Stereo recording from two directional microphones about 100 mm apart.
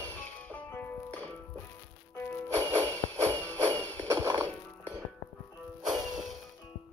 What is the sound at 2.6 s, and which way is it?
Music, 85° right.